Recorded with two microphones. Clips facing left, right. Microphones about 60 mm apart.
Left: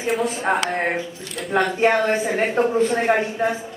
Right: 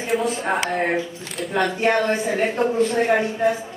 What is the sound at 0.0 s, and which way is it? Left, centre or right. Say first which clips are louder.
Speech: even; centre.